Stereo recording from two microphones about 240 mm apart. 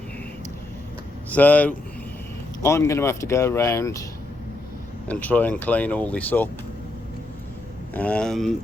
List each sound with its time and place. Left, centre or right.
1.3 s speech: centre
5.0 s speech: centre
7.9 s speech: centre